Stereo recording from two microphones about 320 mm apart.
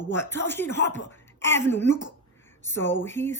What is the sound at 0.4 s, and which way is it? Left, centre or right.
Speech, centre.